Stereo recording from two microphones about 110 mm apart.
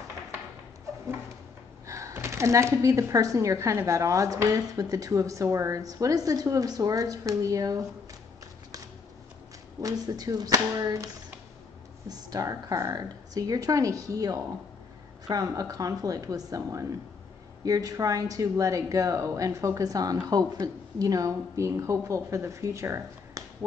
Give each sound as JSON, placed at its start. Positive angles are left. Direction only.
{"t": 1.9, "sound": "speech", "side_deg": -30}
{"t": 9.8, "sound": "speech", "side_deg": -35}
{"t": 12.1, "sound": "speech", "side_deg": -35}